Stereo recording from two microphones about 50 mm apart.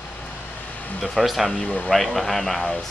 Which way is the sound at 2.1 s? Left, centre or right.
Centre.